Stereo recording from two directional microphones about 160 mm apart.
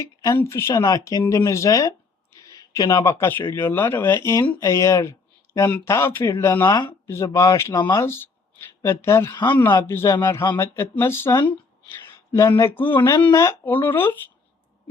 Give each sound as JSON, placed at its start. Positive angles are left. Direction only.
{"t": 0.0, "sound": "speech", "side_deg": 20}
{"t": 6.7, "sound": "speech", "side_deg": 25}